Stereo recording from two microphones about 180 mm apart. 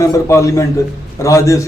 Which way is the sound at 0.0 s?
15° left (ahead or behind).